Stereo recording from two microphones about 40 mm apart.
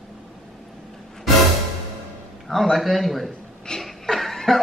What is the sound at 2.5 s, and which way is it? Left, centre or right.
Speech, centre.